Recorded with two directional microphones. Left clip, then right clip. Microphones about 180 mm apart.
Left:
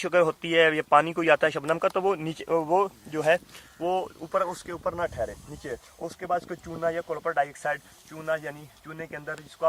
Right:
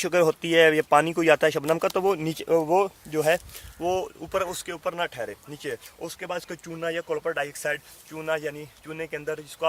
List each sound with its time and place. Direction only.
0.0 s speech: 75° right (ahead or behind); by 4.4 s 50° right (ahead or behind)
4.4 s speech: 40° right (ahead or behind)